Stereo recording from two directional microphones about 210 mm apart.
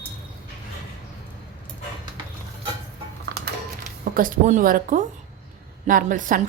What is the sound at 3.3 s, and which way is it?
Music, 55° right (ahead or behind).